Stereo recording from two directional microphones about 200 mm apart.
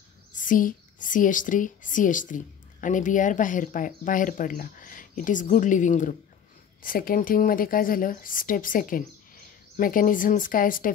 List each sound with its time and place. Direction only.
0.3 s speech: 40° left (ahead or behind)